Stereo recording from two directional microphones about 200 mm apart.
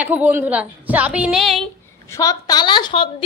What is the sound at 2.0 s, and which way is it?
A woman's voice, 15° left (ahead or behind).